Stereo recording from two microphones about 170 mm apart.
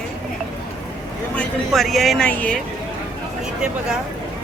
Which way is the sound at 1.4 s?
Centre (ahead or behind).